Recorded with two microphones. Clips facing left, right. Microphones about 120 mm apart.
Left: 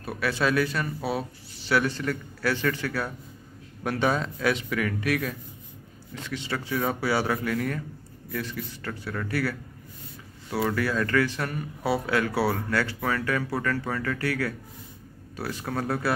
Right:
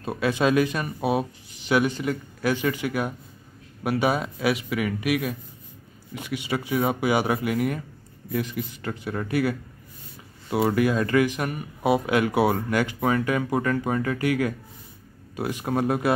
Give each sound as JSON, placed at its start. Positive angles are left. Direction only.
{"t": 0.0, "sound": "speech", "side_deg": -20}